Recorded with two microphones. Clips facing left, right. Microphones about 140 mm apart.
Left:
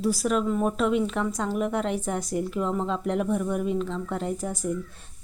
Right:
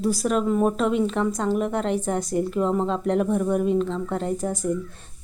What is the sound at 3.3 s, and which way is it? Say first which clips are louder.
Speech: right 4 dB; 35° right (ahead or behind).